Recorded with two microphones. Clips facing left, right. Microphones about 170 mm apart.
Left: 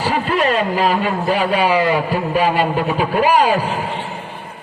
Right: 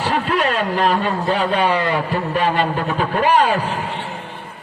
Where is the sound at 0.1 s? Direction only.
Centre (ahead or behind).